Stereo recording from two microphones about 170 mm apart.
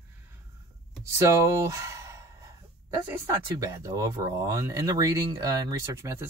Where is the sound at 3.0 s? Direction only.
15° right (ahead or behind).